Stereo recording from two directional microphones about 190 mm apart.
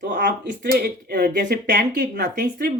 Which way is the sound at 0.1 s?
60° right (ahead or behind).